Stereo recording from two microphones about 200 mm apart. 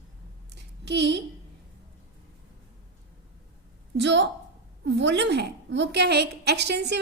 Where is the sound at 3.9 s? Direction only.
60° right (ahead or behind).